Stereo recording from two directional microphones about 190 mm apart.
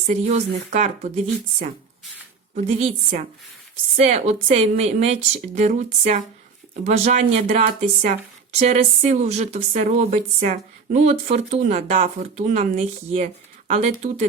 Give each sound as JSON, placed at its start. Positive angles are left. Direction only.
{"t": 0.1, "sound": "speech", "side_deg": -35}